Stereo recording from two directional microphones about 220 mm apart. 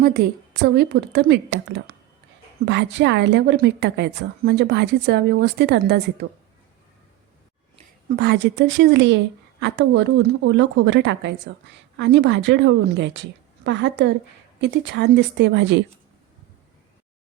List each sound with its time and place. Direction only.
0.0 s a woman's voice: 45° right (ahead or behind)
8.1 s a woman's voice: 50° right (ahead or behind)